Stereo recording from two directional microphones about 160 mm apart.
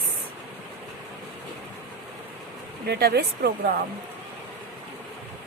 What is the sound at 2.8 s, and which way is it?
Speech, 90° right.